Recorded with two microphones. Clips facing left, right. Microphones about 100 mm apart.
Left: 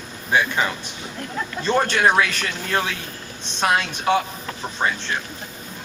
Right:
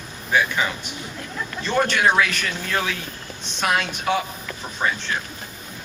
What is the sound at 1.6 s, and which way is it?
A man's voice, 30° left (ahead or behind).